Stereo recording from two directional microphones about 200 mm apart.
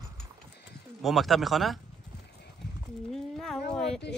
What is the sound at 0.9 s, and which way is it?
Speech, centre (ahead or behind).